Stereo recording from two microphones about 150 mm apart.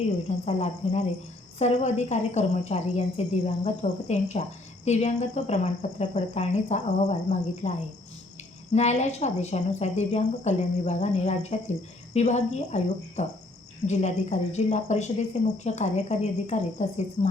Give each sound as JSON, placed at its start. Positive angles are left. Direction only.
{"t": 0.3, "sound": "speech", "side_deg": 50}
{"t": 8.7, "sound": "speech", "side_deg": 50}